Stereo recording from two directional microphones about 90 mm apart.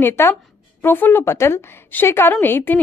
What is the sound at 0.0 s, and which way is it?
A woman's voice, 25° left (ahead or behind).